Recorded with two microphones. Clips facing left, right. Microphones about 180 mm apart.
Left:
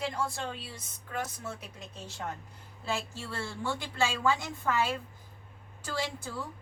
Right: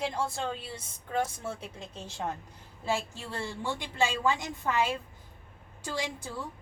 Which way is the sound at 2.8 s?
15° right (ahead or behind).